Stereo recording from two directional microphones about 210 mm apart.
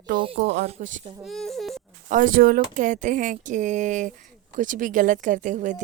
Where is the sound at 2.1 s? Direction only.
40° right (ahead or behind).